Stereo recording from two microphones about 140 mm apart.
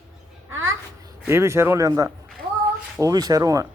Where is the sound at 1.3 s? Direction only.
20° right (ahead or behind).